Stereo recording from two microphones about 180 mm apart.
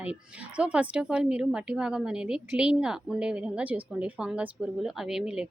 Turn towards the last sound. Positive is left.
turn(degrees=-5)  # may be behind; listen again after turning